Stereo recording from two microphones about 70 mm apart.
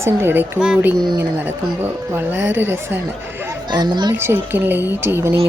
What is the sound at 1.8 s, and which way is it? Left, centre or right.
Speech, right.